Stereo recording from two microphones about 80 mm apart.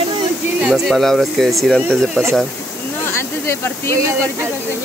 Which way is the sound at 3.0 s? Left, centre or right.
Left.